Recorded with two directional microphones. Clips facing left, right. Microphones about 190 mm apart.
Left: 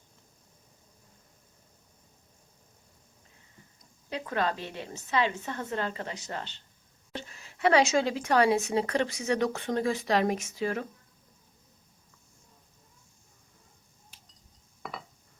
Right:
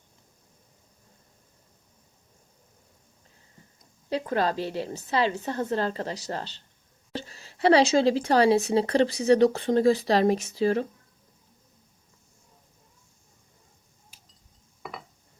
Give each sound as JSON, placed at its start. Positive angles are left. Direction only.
{"t": 4.1, "sound": "speech", "side_deg": -35}
{"t": 14.8, "sound": "dishes", "side_deg": -5}